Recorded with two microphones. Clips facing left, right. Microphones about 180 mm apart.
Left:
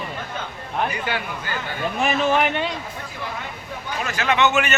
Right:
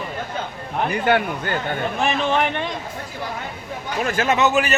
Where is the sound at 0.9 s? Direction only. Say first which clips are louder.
Right 8 dB; 55° right (ahead or behind).